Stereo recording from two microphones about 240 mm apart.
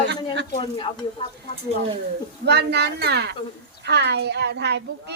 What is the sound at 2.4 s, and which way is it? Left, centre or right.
A woman's voice, right.